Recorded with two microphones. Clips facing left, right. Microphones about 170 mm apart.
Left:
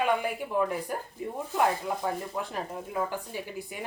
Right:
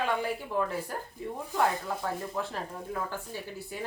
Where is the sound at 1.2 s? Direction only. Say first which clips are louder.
Left 1 dB; 15° left (ahead or behind).